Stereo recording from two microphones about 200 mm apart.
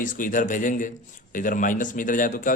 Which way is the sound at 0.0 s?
40° left (ahead or behind).